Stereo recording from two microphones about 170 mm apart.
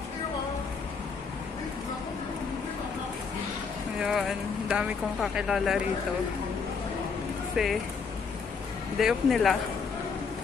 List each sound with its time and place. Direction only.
4.0 s speech: centre (ahead or behind)
7.5 s speech: centre (ahead or behind)
8.9 s speech: centre (ahead or behind)